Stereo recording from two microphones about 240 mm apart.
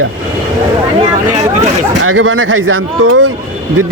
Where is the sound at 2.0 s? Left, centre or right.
Right.